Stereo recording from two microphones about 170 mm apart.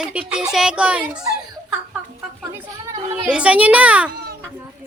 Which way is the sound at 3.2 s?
5° right (ahead or behind).